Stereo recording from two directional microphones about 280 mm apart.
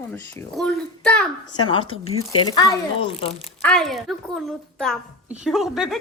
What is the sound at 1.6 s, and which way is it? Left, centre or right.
A woman's voice, centre.